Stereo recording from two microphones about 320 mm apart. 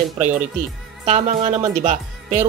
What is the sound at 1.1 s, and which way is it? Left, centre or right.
Speech, centre.